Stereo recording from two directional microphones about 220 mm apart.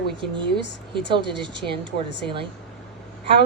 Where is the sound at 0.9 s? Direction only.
20° right (ahead or behind).